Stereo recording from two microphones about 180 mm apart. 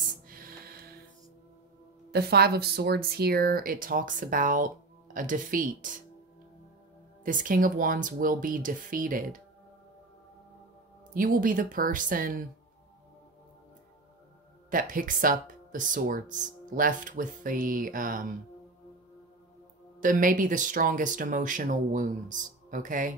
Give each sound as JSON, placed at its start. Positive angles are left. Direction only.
{"t": 0.3, "sound": "music", "side_deg": -55}
{"t": 2.0, "sound": "speech", "side_deg": -60}
{"t": 7.2, "sound": "speech", "side_deg": -45}
{"t": 11.1, "sound": "speech", "side_deg": -50}
{"t": 14.7, "sound": "speech", "side_deg": -50}
{"t": 20.0, "sound": "speech", "side_deg": -50}